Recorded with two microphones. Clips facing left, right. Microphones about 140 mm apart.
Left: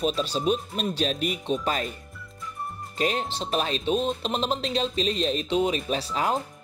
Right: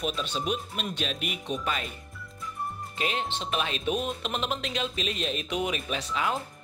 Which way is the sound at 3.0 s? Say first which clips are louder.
Left 4 dB; 40° left (ahead or behind).